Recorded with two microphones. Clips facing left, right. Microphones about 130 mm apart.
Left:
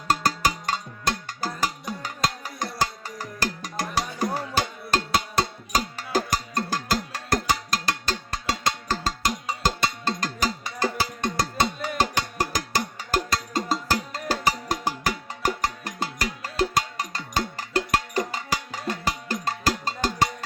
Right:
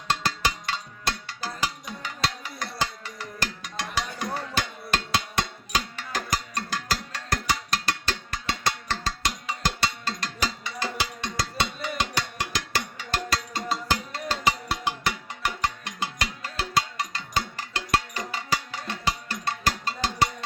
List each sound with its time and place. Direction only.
0.1 s cowbell: 45° left (ahead or behind)
1.6 s music: 45° left (ahead or behind)